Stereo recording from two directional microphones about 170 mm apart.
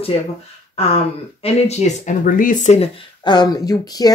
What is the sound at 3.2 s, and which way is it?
Speech, 25° left (ahead or behind).